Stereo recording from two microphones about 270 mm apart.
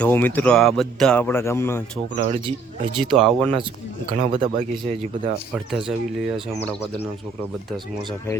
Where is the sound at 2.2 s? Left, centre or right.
Right.